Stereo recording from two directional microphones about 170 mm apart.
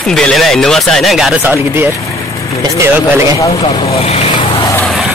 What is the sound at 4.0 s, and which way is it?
Speech, 35° left (ahead or behind).